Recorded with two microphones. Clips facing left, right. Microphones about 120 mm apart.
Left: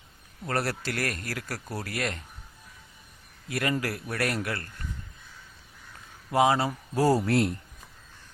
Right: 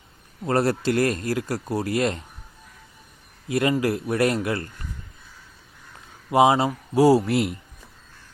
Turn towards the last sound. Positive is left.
turn(degrees=-5)  # may be behind; listen again after turning